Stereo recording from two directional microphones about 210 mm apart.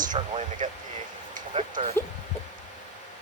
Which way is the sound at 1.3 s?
40° right (ahead or behind).